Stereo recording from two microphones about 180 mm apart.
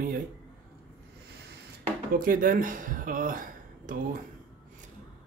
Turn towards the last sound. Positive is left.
turn(degrees=-50)  # may be behind; listen again after turning